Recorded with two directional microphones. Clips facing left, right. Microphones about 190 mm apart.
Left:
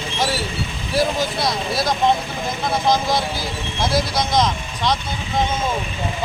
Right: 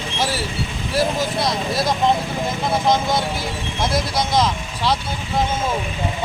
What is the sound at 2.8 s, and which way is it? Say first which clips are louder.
Speech: left 1 dB; centre (ahead or behind).